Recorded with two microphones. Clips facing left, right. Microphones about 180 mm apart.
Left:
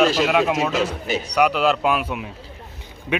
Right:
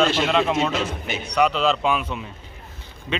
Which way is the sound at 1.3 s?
5° left (ahead or behind).